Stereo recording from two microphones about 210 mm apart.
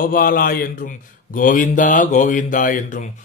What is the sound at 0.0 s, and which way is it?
Speech, 40° left (ahead or behind).